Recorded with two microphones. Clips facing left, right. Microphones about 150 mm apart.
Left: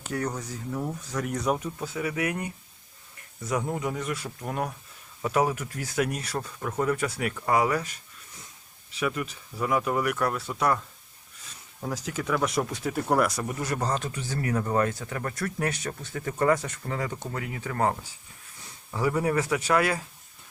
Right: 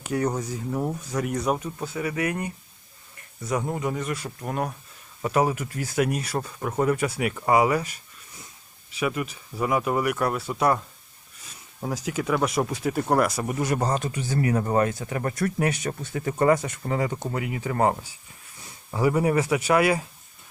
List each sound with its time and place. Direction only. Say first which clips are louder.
0.0 s speech: right 5 dB; 15° right (ahead or behind)
1.2 s speech: right 1 dB; 5° right (ahead or behind)
3.8 s speech: right 2 dB; centre (ahead or behind)
6.6 s speech: right 3 dB; 20° right (ahead or behind)
6.9 s speech: right 3 dB; 10° right (ahead or behind)
12.0 s speech: right 3 dB; 10° right (ahead or behind)
13.4 s speech: right 4 dB; 15° right (ahead or behind)
18.9 s speech: right 4 dB; 10° right (ahead or behind)